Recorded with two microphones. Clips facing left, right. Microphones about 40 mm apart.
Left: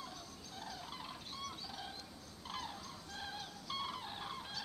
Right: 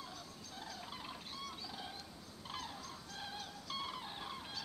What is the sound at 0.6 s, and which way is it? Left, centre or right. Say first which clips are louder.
Music: left 1 dB; centre.